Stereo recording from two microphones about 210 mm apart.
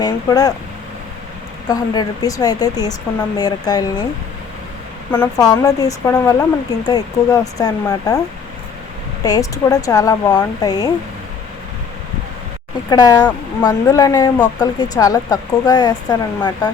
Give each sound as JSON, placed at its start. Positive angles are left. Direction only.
{"t": 0.0, "sound": "speech", "side_deg": 20}
{"t": 1.6, "sound": "speech", "side_deg": 20}
{"t": 5.1, "sound": "speech", "side_deg": 15}
{"t": 9.2, "sound": "speech", "side_deg": 15}
{"t": 12.9, "sound": "speech", "side_deg": 20}